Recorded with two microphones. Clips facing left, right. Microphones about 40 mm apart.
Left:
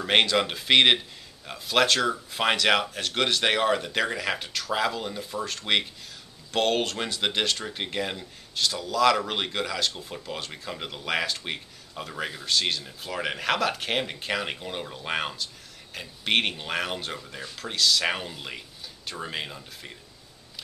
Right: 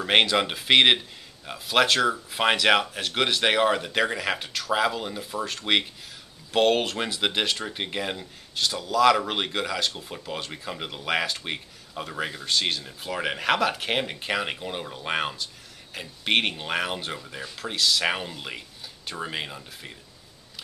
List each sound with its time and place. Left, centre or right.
0.0 s speech: centre